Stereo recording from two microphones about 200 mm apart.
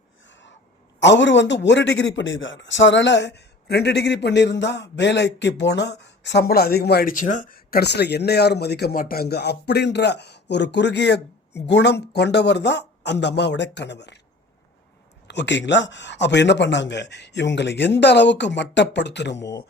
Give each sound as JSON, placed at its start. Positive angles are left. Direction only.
{"t": 0.3, "sound": "a sound", "side_deg": 65}
{"t": 0.9, "sound": "a man's voice", "side_deg": 65}
{"t": 15.3, "sound": "a man's voice", "side_deg": 60}